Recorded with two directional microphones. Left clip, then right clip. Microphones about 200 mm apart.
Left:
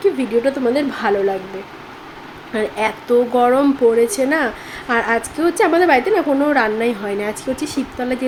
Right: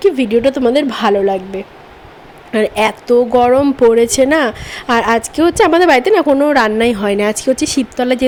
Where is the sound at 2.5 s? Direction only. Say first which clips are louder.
Right 6 dB; 40° right (ahead or behind).